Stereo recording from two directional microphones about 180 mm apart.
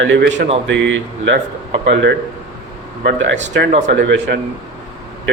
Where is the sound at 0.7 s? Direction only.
80° right.